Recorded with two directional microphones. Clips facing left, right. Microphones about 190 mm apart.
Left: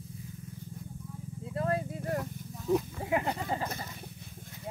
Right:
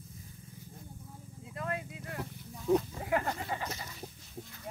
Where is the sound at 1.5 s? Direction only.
35° left (ahead or behind).